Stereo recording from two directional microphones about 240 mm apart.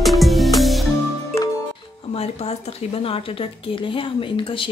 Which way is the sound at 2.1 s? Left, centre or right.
Left.